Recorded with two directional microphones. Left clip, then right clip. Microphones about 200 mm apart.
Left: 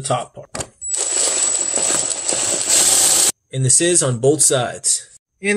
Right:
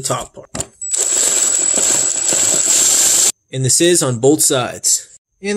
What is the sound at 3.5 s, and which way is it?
Speech, 30° right (ahead or behind).